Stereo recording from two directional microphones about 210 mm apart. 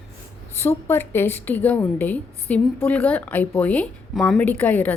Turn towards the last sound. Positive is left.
turn(degrees=10)  # may be behind; listen again after turning